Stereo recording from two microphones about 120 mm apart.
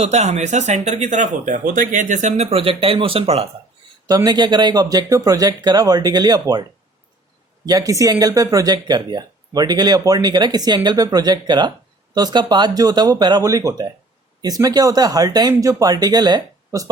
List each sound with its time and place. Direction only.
0.0 s speech: 65° right (ahead or behind)
4.0 s speech: 35° right (ahead or behind)